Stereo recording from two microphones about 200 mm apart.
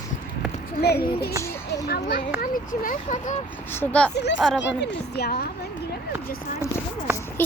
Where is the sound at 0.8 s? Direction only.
50° left (ahead or behind).